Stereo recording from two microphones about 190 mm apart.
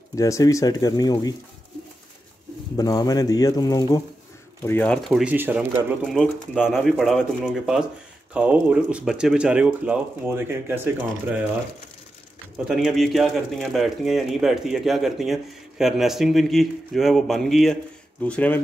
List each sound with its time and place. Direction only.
0.1 s speech: 15° left (ahead or behind)
2.8 s speech: 20° left (ahead or behind)
4.6 s speech: 5° left (ahead or behind); by 5.9 s 10° right (ahead or behind)
6.0 s speech: centre (ahead or behind)
12.6 s speech: centre (ahead or behind)